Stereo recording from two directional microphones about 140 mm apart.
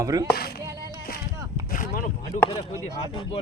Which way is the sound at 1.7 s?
70° left (ahead or behind).